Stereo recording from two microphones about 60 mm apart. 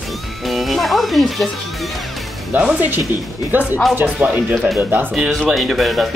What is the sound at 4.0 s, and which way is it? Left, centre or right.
Speech, right.